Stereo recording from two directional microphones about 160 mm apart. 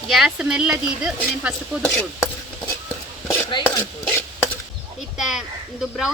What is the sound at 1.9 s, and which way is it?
Stir, 15° left (ahead or behind).